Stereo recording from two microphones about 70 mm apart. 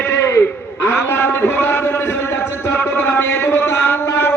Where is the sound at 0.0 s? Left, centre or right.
Left.